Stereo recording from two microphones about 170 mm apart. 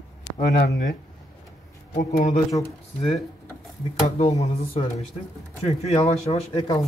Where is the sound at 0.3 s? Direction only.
10° left (ahead or behind).